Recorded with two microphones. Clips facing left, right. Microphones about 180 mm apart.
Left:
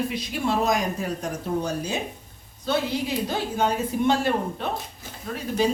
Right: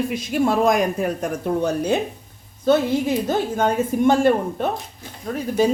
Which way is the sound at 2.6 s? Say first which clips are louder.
Right 8 dB; 50° right (ahead or behind).